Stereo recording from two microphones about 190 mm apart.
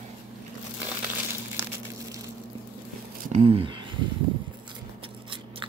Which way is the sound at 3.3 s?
30° right (ahead or behind).